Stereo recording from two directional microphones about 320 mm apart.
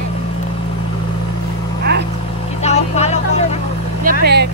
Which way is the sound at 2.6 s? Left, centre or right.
Left.